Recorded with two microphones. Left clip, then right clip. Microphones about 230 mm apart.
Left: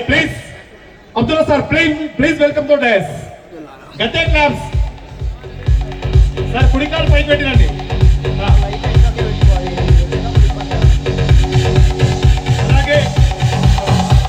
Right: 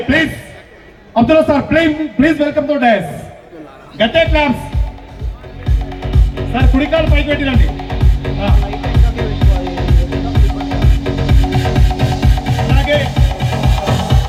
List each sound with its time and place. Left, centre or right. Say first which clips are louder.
1.1 s a man's voice: right 3 dB; left
6.0 s music: left 2 dB; left